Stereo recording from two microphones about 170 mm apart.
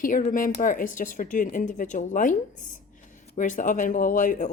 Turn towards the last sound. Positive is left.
turn(degrees=50)  # may be behind; listen again after turning